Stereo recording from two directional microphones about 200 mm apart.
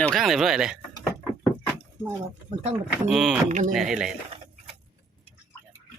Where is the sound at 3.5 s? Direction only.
35° right (ahead or behind).